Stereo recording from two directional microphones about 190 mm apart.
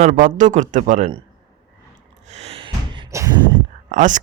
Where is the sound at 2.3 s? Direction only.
35° right (ahead or behind).